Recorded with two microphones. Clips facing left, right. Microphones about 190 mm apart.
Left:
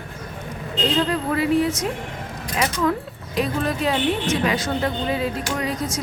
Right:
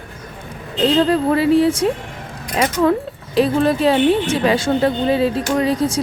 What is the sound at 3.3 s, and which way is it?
Speech, 30° right (ahead or behind).